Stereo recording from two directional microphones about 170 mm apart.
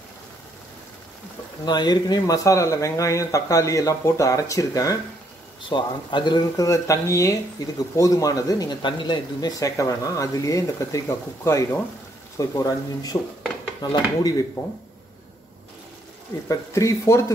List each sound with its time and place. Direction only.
1.6 s speech: 25° left (ahead or behind)
16.4 s speech: 20° left (ahead or behind)